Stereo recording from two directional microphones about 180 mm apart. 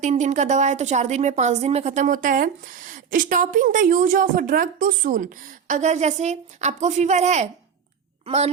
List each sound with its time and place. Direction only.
0.0 s a woman's voice: 40° right (ahead or behind)